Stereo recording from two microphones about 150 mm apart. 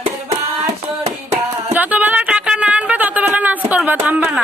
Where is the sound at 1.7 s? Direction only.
10° right (ahead or behind).